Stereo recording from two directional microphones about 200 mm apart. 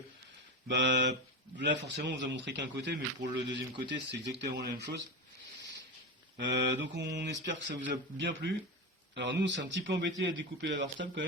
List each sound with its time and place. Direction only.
0.7 s a man's voice: 60° right (ahead or behind)
6.3 s a man's voice: 60° right (ahead or behind)